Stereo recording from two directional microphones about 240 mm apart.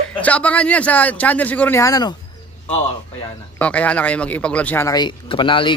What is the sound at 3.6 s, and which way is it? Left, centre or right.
A man's voice, centre.